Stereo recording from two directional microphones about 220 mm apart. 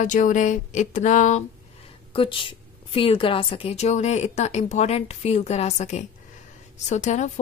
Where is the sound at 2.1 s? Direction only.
25° left (ahead or behind).